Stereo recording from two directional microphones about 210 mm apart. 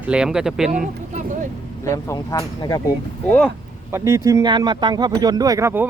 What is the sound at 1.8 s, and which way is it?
Speech, 15° left (ahead or behind).